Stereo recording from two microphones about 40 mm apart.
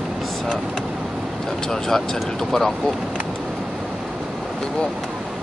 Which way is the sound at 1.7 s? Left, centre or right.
Centre.